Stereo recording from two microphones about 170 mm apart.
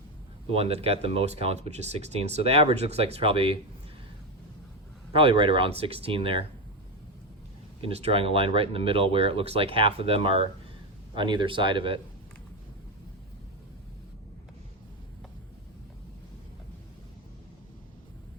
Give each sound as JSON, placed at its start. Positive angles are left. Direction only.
{"t": 0.5, "sound": "speech", "side_deg": -35}
{"t": 5.1, "sound": "speech", "side_deg": -30}
{"t": 7.8, "sound": "speech", "side_deg": -35}